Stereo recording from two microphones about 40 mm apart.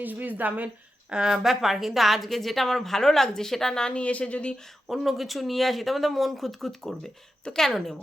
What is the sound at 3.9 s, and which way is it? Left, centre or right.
Speech, left.